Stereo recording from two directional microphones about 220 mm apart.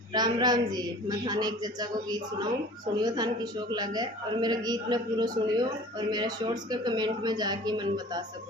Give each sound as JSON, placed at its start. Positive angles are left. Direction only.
{"t": 0.1, "sound": "a woman's voice", "side_deg": -20}